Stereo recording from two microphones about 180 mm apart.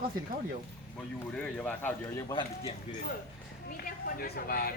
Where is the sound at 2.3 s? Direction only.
25° left (ahead or behind).